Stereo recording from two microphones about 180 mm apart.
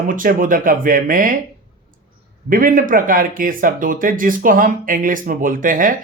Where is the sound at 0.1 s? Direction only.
50° right (ahead or behind).